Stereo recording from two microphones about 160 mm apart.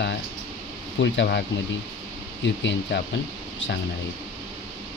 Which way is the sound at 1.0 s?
90° left.